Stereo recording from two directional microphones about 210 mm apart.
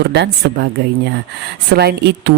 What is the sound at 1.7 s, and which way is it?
Speech, 50° right (ahead or behind).